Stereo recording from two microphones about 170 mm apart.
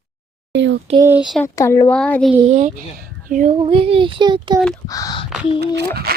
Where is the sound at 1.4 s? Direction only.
15° left (ahead or behind).